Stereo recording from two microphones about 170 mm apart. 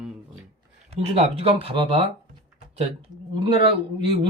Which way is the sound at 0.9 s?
35° right (ahead or behind).